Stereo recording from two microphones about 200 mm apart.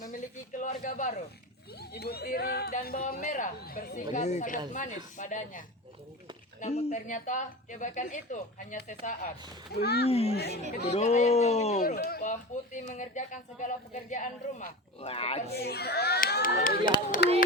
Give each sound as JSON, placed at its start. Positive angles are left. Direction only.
{"t": 0.6, "sound": "speech", "side_deg": 40}
{"t": 1.8, "sound": "a child's voice", "side_deg": 50}
{"t": 9.7, "sound": "a child's voice", "side_deg": 55}
{"t": 10.1, "sound": "speech", "side_deg": 30}
{"t": 11.8, "sound": "speech", "side_deg": 45}
{"t": 15.6, "sound": "a child's voice", "side_deg": 55}